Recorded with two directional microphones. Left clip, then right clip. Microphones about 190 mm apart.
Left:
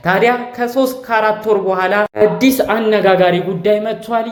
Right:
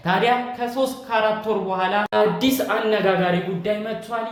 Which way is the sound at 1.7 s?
45° left (ahead or behind).